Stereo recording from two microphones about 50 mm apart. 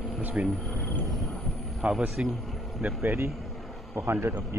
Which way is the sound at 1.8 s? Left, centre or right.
Right.